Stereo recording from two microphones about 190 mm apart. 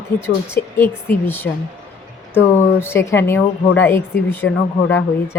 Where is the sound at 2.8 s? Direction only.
15° left (ahead or behind).